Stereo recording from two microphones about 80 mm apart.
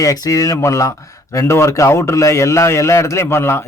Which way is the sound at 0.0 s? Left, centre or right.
Left.